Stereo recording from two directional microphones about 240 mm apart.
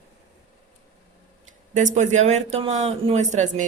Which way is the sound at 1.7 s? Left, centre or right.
Right.